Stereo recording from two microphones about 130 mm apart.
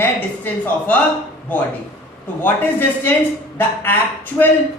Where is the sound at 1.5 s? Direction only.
15° left (ahead or behind).